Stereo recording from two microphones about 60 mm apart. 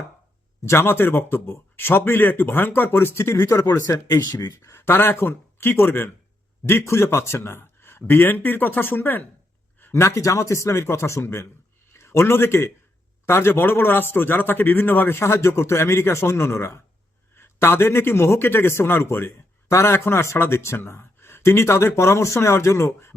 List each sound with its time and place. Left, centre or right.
0.6 s speech: left
3.8 s speech: left
4.8 s speech: left
9.9 s a man's voice: left
15.2 s speech: left